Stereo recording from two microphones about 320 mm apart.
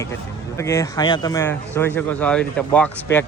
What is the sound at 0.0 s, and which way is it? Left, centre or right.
Speech, centre.